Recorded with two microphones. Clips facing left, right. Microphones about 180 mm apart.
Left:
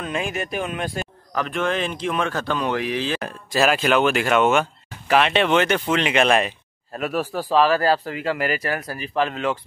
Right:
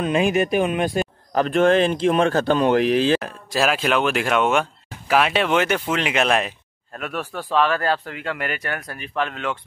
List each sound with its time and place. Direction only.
0.0 s speech: 20° right (ahead or behind)
1.3 s a man's voice: 35° right (ahead or behind)
3.2 s speech: centre (ahead or behind)